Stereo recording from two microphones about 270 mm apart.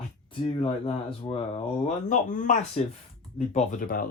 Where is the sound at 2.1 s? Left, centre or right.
Left.